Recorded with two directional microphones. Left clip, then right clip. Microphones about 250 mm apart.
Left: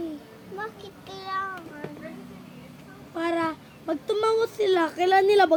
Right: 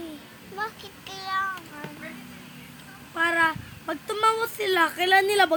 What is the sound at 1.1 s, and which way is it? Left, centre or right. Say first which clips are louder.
Child singing: right 2 dB; right.